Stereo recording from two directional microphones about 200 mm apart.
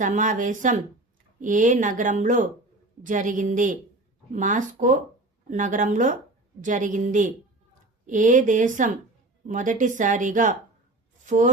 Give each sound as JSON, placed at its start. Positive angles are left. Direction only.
{"t": 0.0, "sound": "speech", "side_deg": -40}